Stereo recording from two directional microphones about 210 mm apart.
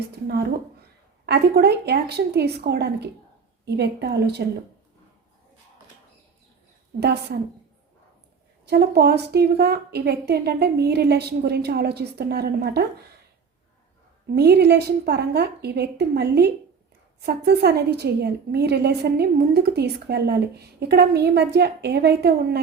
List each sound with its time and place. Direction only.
1.2 s a woman's voice: 50° right (ahead or behind)
7.0 s a woman's voice: 55° right (ahead or behind)
8.6 s a woman's voice: 50° right (ahead or behind)
14.3 s a woman's voice: 50° right (ahead or behind)